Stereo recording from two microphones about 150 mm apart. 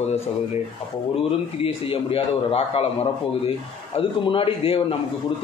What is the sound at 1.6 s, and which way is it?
A man's voice, 40° left (ahead or behind).